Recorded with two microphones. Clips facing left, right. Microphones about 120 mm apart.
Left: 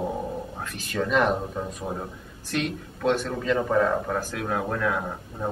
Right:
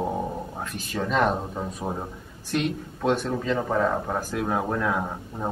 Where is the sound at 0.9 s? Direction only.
5° right (ahead or behind).